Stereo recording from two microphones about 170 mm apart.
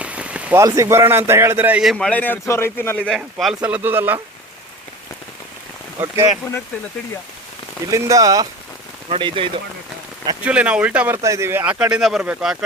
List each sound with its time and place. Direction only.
0.0 s rain on surface: 5° right (ahead or behind)
0.6 s a man's voice: 20° right (ahead or behind); by 3.0 s 15° left (ahead or behind)
3.1 s speech: centre (ahead or behind)
6.0 s speech: 10° right (ahead or behind)
7.9 s speech: 20° right (ahead or behind)
10.4 s speech: 10° right (ahead or behind)